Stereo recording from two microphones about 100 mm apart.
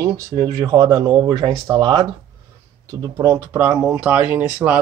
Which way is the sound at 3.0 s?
35° right (ahead or behind).